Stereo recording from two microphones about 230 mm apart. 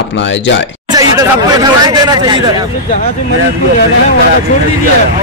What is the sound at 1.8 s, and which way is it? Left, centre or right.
Speech, centre.